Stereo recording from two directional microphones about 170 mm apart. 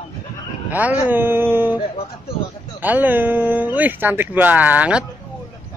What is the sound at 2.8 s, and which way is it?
Speech, 10° right (ahead or behind).